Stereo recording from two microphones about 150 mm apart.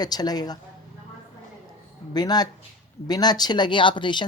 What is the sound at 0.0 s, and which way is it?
Speech, 25° left (ahead or behind).